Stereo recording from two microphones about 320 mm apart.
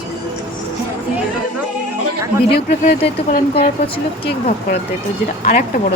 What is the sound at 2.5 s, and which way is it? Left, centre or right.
Speech, left.